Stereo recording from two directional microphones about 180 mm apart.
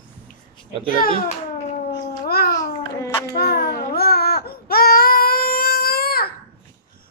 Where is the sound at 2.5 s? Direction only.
20° left (ahead or behind).